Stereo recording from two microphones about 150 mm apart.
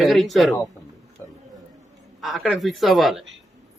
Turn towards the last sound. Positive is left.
turn(degrees=0)  # may be behind; listen again after turning